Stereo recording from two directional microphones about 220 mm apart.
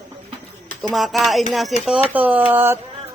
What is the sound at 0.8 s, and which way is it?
Speech, centre (ahead or behind).